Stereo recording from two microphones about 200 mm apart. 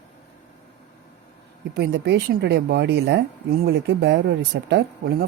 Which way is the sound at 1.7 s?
55° right (ahead or behind).